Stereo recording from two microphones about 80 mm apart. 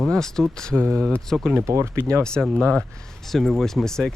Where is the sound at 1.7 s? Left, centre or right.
Right.